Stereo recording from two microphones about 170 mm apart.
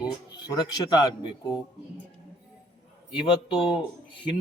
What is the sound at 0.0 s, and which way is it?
Speech, 25° left (ahead or behind).